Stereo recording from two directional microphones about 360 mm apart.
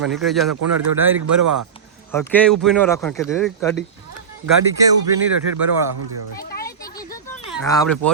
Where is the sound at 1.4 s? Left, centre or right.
Right.